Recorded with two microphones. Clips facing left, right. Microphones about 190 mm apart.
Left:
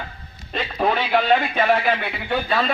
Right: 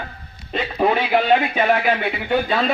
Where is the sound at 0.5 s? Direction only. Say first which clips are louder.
Right 3 dB; 5° right (ahead or behind).